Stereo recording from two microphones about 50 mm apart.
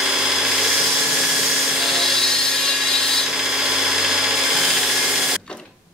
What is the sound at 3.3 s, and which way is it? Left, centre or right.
Tools, centre.